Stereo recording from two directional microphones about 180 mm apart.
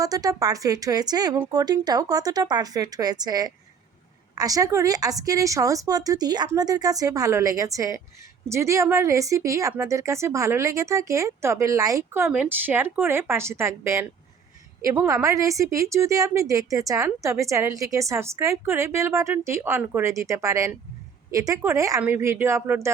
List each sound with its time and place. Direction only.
0.0 s a woman's voice: 20° right (ahead or behind)